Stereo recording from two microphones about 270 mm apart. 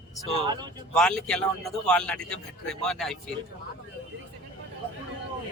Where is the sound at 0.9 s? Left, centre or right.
Centre.